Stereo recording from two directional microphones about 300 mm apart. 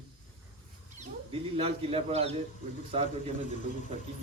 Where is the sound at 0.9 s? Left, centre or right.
Centre.